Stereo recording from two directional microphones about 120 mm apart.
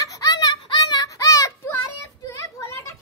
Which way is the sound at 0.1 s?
30° left (ahead or behind).